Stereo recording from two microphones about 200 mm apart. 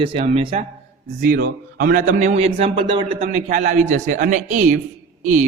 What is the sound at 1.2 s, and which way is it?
A man's voice, 45° right (ahead or behind).